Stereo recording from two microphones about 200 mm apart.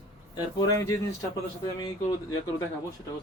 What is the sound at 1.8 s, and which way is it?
Speech, 15° left (ahead or behind).